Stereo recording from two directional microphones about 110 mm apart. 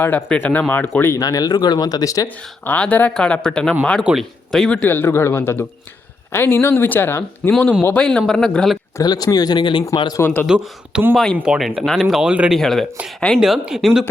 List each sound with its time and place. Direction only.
0.0 s speech: 20° left (ahead or behind)
1.2 s speech: 35° left (ahead or behind)
2.2 s speech: 15° left (ahead or behind)
9.0 s speech: 35° left (ahead or behind)
10.2 s speech: 20° left (ahead or behind)
10.4 s speech: 10° right (ahead or behind)
11.1 s speech: 5° left (ahead or behind)
11.3 s speech: 5° right (ahead or behind)
12.5 s speech: 5° left (ahead or behind)